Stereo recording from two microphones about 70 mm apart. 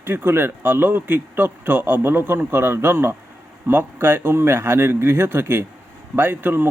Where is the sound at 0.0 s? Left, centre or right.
Right.